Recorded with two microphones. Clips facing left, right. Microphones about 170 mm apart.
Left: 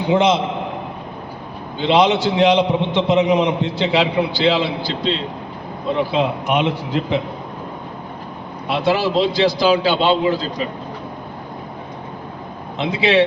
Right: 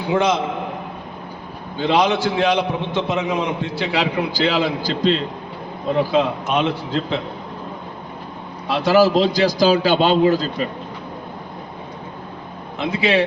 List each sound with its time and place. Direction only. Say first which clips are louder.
0.0 s a man's voice: left 3 dB; 20° left (ahead or behind)
1.8 s a man's voice: left 2 dB; 20° left (ahead or behind)
4.4 s a man's voice: even; 40° right (ahead or behind)
6.1 s a man's voice: even; 15° left (ahead or behind)
9.0 s a man's voice: right 2 dB; 40° right (ahead or behind)
12.8 s speech: left 2 dB; 20° left (ahead or behind)